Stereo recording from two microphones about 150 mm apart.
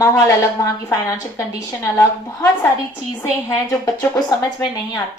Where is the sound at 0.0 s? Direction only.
20° left (ahead or behind).